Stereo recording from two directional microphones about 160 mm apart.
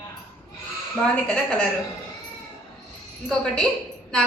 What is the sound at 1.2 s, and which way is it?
Speech, 5° left (ahead or behind).